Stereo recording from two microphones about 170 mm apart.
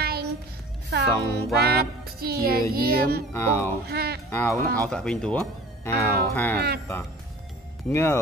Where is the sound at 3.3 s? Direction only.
15° left (ahead or behind).